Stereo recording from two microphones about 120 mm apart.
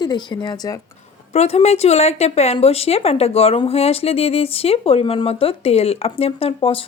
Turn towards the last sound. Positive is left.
turn(degrees=50)  # may be behind; listen again after turning